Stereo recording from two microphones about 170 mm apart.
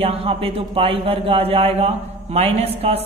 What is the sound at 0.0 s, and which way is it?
A woman's voice, 35° right (ahead or behind).